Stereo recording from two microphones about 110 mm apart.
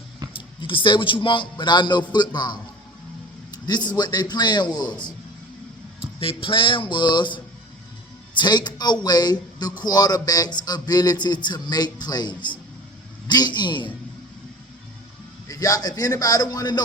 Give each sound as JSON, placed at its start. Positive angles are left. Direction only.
{"t": 0.3, "sound": "speech", "side_deg": 50}
{"t": 3.7, "sound": "a man's voice", "side_deg": 40}
{"t": 6.1, "sound": "a man's voice", "side_deg": 55}
{"t": 15.4, "sound": "a man's voice", "side_deg": 30}